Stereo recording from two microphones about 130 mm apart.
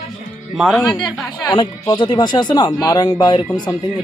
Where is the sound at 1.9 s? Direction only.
35° left (ahead or behind).